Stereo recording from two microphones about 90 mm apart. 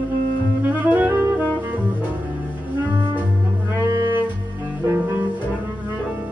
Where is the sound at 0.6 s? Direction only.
20° right (ahead or behind).